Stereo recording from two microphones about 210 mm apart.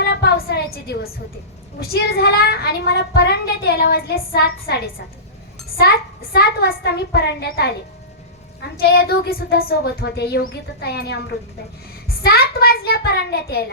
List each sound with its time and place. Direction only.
0.0 s a sound: 50° left (ahead or behind)
1.8 s a woman's voice: 45° left (ahead or behind)
6.3 s a woman's voice: 50° left (ahead or behind)
8.8 s a woman's voice: 45° left (ahead or behind)